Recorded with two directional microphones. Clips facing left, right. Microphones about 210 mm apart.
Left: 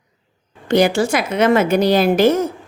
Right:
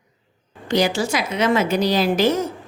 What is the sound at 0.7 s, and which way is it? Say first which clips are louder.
A woman's voice: left 5 dB; 55° left (ahead or behind).